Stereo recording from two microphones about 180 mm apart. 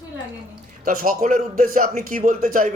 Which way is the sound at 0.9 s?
50° right (ahead or behind).